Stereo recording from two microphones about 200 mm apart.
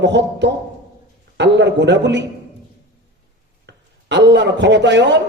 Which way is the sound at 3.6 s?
60° right (ahead or behind).